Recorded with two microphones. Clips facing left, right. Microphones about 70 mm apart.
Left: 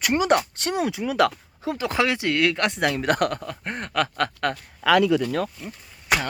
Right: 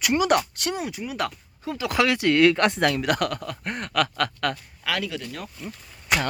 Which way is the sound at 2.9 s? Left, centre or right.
Left.